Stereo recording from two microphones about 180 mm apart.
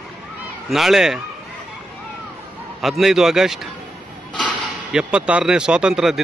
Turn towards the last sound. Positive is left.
turn(degrees=-5)  # may be behind; listen again after turning